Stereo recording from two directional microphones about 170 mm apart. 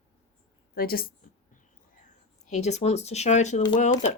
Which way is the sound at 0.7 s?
60° left (ahead or behind).